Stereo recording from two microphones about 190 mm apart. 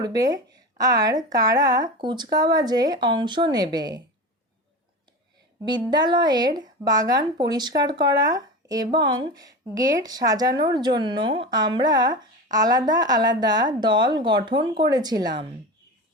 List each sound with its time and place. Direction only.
0.0 s speech: 20° right (ahead or behind)
5.6 s speech: 20° right (ahead or behind)